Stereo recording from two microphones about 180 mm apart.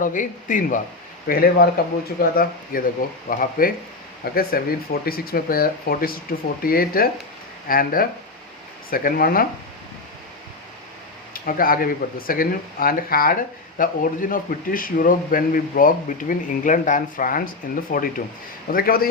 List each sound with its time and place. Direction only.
0.0 s speech: 45° left (ahead or behind)
11.3 s speech: 50° left (ahead or behind)